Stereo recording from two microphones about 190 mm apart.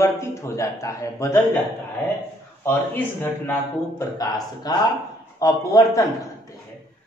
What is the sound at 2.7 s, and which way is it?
A man's voice, 10° left (ahead or behind).